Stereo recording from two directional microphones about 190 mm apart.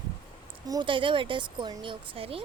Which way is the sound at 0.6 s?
20° right (ahead or behind).